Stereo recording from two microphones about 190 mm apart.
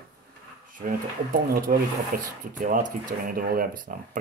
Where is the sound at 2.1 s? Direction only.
50° right (ahead or behind).